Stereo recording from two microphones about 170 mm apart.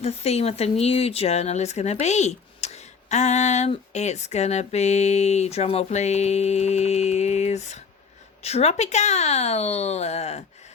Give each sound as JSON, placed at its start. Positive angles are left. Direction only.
{"t": 0.0, "sound": "speech", "side_deg": 40}